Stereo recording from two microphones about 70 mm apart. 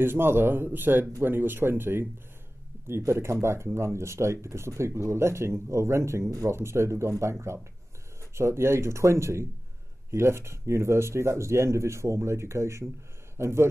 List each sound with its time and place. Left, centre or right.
0.0 s speech: right